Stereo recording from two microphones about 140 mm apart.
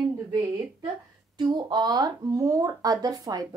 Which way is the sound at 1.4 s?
30° right (ahead or behind).